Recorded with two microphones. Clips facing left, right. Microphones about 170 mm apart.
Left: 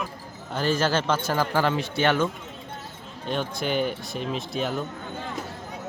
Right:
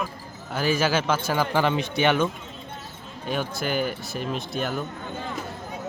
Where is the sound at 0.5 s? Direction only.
10° right (ahead or behind).